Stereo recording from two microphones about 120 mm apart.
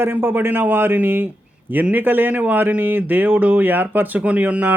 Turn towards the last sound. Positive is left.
turn(degrees=-15)  # may be behind; listen again after turning